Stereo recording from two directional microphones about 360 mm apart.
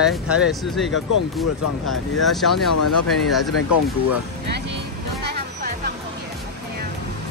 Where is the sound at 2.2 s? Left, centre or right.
Centre.